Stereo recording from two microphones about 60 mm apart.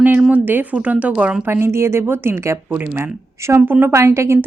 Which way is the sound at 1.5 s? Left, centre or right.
Right.